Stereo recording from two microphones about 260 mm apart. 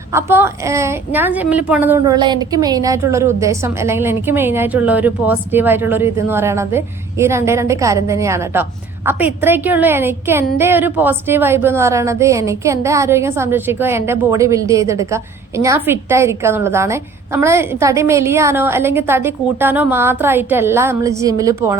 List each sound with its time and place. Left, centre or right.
0.1 s a woman's voice: centre